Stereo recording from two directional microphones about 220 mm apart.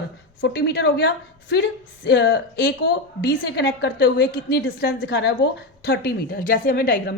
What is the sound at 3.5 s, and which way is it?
Speech, 50° left (ahead or behind).